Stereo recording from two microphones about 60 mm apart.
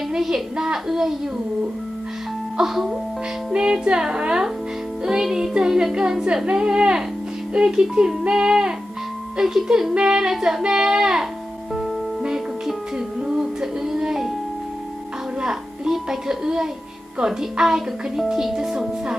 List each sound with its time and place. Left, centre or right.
0.1 s a woman's voice: centre
2.5 s music: centre
3.5 s speech: centre
5.0 s music: centre
6.4 s speech: centre
13.3 s music: centre
15.4 s a child's voice: centre